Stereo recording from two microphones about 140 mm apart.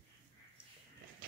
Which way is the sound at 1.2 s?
90° right.